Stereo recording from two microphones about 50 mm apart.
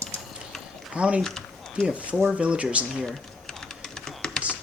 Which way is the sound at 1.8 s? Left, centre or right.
Right.